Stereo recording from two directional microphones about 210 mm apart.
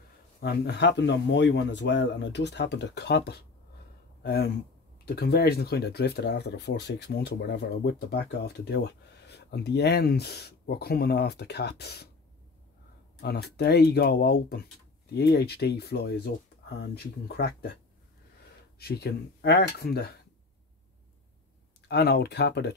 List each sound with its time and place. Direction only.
0.4 s speech: 50° left (ahead or behind)
13.2 s speech: 50° left (ahead or behind)
18.8 s speech: 50° left (ahead or behind)
21.8 s speech: 50° left (ahead or behind)